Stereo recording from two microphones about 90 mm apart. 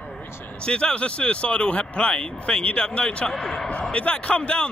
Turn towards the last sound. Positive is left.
turn(degrees=15)  # may be behind; listen again after turning